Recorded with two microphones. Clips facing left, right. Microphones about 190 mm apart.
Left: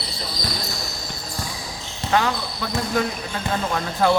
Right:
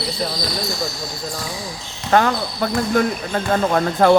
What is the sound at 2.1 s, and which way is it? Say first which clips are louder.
Speech: right 5 dB; 50° right (ahead or behind).